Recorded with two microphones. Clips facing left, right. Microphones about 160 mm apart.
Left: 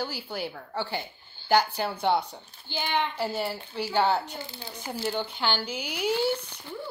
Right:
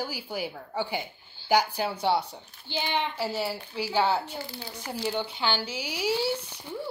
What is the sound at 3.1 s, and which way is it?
A woman's voice, 5° right (ahead or behind).